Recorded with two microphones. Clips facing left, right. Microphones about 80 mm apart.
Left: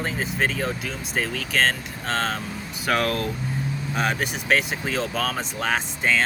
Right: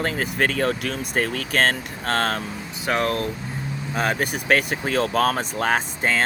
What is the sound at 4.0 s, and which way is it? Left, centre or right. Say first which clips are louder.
Speech: right 3 dB; right.